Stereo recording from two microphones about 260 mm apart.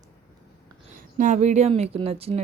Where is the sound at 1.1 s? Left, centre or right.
Right.